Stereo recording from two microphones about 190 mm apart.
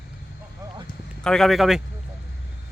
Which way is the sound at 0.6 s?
20° right (ahead or behind).